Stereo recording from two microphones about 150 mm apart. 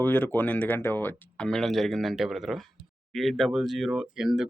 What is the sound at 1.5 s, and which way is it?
Speech, centre (ahead or behind).